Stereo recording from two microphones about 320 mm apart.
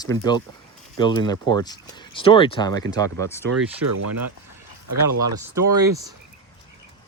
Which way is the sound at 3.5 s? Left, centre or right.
Right.